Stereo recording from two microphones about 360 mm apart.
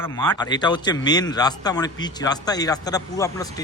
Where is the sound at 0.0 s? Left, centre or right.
Centre.